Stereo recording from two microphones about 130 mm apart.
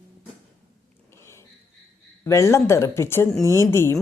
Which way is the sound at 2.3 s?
20° left (ahead or behind).